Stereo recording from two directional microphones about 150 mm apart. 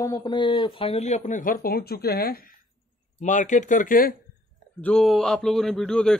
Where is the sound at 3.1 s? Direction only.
55° left (ahead or behind).